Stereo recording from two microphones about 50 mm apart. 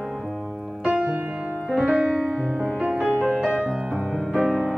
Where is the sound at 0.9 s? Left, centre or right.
Right.